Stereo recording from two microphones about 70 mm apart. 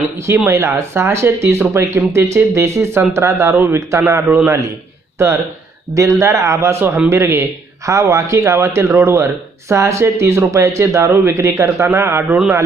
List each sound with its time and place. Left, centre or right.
0.4 s speech: right
12.3 s a man's voice: right